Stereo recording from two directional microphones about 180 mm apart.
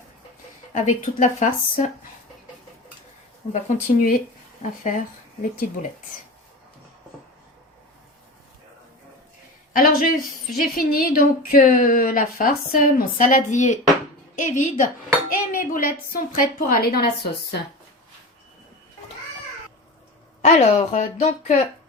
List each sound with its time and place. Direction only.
0.7 s a woman's voice: 45° left (ahead or behind)
3.5 s a woman's voice: 45° left (ahead or behind)
9.7 s a sound: 50° left (ahead or behind)
10.6 s a woman's voice: 50° left (ahead or behind)
15.3 s dishes: 50° left (ahead or behind)
16.1 s a woman's voice: 55° left (ahead or behind)
20.4 s a woman's voice: 35° left (ahead or behind)